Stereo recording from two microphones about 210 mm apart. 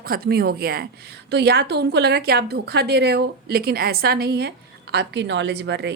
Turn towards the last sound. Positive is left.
turn(degrees=-50)  # may be behind; listen again after turning